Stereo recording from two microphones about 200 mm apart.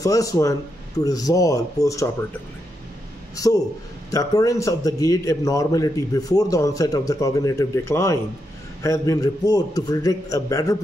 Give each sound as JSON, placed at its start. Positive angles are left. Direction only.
{"t": 0.0, "sound": "a man's voice", "side_deg": 15}
{"t": 3.3, "sound": "a man's voice", "side_deg": 15}